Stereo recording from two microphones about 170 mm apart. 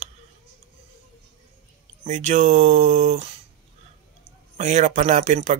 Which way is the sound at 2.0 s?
45° right (ahead or behind).